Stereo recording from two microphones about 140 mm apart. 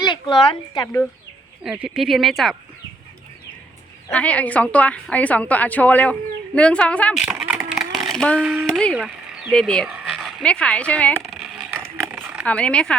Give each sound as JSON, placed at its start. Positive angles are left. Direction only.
{"t": 0.1, "sound": "speech", "side_deg": 35}
{"t": 1.6, "sound": "speech", "side_deg": -5}
{"t": 4.1, "sound": "a woman's voice", "side_deg": 10}
{"t": 7.1, "sound": "a sound", "side_deg": -5}
{"t": 8.4, "sound": "speech", "side_deg": -5}
{"t": 8.6, "sound": "speech", "side_deg": 5}
{"t": 11.3, "sound": "a sound", "side_deg": 0}
{"t": 12.5, "sound": "a woman's voice", "side_deg": 10}